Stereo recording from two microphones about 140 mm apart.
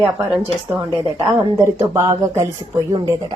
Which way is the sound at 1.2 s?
20° right (ahead or behind).